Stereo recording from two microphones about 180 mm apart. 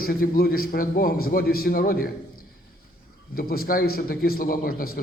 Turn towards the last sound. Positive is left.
turn(degrees=55)  # may be behind; listen again after turning